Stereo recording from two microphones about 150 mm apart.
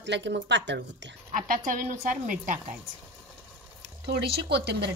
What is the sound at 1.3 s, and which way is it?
A woman's voice, 65° right (ahead or behind).